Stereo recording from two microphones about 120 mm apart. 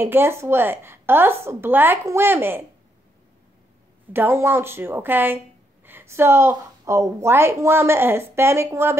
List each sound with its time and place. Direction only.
0.0 s a woman's voice: 20° right (ahead or behind)
4.1 s a woman's voice: 20° right (ahead or behind)